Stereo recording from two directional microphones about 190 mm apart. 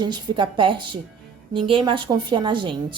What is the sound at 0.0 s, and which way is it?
Speech, 25° right (ahead or behind).